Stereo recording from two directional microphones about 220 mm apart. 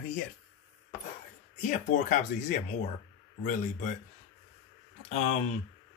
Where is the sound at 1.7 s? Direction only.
35° left (ahead or behind).